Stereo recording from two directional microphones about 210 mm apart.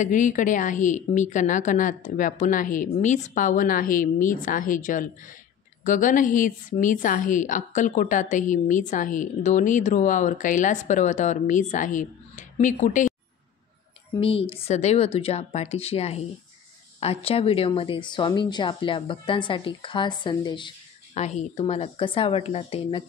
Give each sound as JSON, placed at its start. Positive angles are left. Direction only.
{"t": 0.0, "sound": "a woman's voice", "side_deg": 40}
{"t": 14.1, "sound": "speech", "side_deg": 25}